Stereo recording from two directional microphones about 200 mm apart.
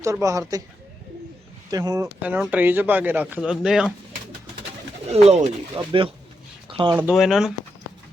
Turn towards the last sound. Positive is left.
turn(degrees=0)  # may be behind; listen again after turning